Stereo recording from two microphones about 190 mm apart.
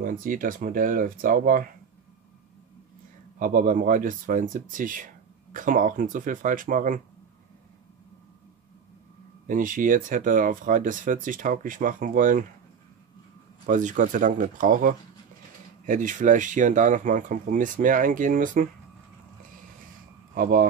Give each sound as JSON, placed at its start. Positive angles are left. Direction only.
{"t": 0.0, "sound": "speech", "side_deg": -45}
{"t": 3.3, "sound": "speech", "side_deg": -45}
{"t": 9.5, "sound": "speech", "side_deg": -45}
{"t": 13.7, "sound": "speech", "side_deg": -40}
{"t": 20.3, "sound": "speech", "side_deg": -50}